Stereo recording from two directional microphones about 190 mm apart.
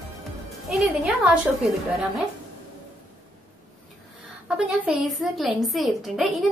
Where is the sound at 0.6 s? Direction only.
Centre (ahead or behind).